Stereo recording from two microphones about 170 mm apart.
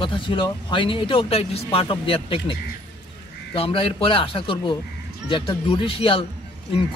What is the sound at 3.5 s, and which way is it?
Speech, 35° left (ahead or behind).